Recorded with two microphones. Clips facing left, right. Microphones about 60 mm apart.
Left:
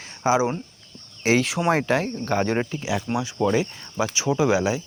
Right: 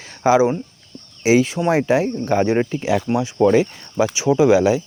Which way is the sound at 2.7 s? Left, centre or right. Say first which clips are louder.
Right 6 dB; right.